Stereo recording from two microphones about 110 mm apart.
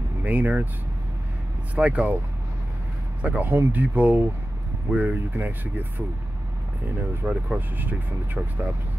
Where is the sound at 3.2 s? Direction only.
15° right (ahead or behind).